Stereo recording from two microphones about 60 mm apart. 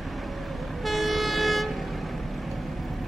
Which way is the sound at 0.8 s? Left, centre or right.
Centre.